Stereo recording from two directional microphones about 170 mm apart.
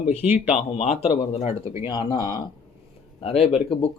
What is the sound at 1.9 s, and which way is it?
Speech, 25° left (ahead or behind).